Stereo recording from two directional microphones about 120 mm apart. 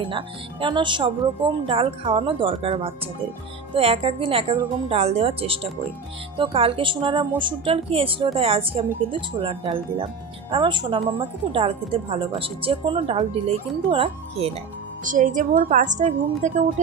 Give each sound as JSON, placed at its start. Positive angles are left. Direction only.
{"t": 0.0, "sound": "speech", "side_deg": -45}
{"t": 15.0, "sound": "a woman's voice", "side_deg": -90}